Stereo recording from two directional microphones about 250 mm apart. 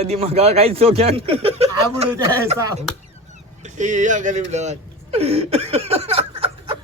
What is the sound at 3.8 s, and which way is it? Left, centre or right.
Speech, right.